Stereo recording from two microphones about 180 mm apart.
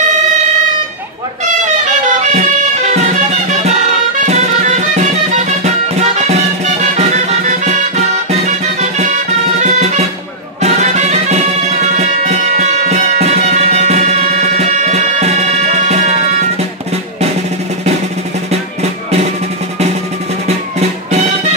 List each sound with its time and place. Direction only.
0.0 s a sound: 40° right (ahead or behind)
1.6 s music: 40° right (ahead or behind)
18.5 s music: 35° right (ahead or behind)